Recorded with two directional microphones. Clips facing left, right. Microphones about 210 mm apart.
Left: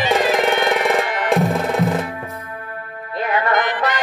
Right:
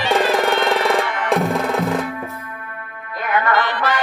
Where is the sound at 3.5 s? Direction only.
20° left (ahead or behind).